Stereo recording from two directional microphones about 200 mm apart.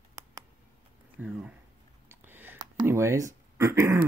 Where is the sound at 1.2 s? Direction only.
5° right (ahead or behind).